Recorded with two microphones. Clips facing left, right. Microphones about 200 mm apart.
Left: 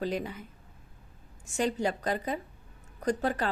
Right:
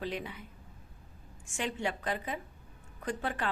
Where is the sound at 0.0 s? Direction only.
40° left (ahead or behind).